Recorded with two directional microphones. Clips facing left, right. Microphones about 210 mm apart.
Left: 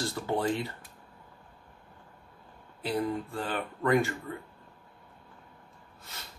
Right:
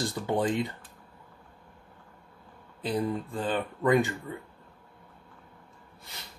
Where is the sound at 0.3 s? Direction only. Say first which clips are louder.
Right 2 dB; 15° right (ahead or behind).